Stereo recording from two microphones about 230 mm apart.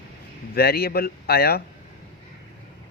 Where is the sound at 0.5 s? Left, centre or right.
Left.